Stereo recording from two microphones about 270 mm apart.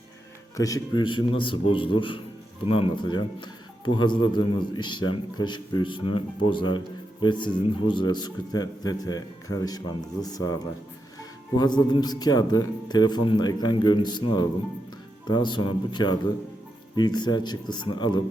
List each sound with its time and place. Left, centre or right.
0.5 s a man's voice: centre